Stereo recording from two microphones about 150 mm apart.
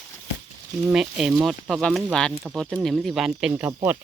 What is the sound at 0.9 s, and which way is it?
Speech, 5° right (ahead or behind).